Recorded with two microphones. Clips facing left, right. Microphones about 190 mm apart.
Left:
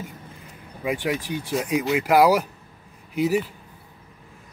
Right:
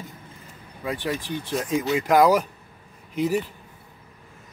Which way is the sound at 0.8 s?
15° left (ahead or behind).